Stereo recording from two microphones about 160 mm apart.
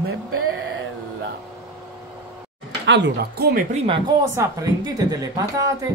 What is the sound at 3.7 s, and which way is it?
Speech, 35° right (ahead or behind).